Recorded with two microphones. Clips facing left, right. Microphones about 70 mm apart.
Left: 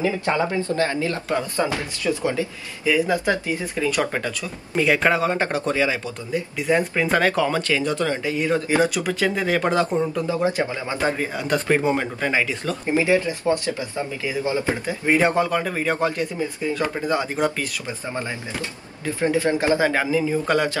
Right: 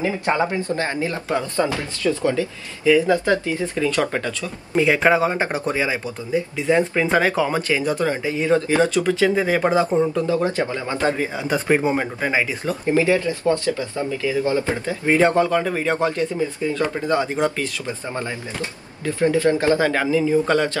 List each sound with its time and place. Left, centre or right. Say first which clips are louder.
0.0 s speech: right 1 dB; right
1.6 s speech: right 2 dB; left
4.7 s speech: right 3 dB; centre
6.7 s speech: right 2 dB; centre
8.4 s speech: right 2 dB; centre
9.1 s speech: right 4 dB; centre
9.5 s speech: right 2 dB; centre
10.1 s speech: right 2 dB; centre
11.3 s speech: right 1 dB; centre
12.9 s speech: right 1 dB; left; by 17.9 s centre
19.1 s speech: right 3 dB; left